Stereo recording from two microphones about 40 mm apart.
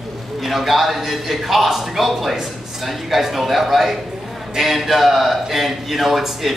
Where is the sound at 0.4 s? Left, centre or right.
Centre.